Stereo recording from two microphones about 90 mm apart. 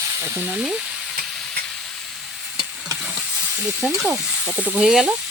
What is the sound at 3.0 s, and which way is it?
Stir, 10° right (ahead or behind).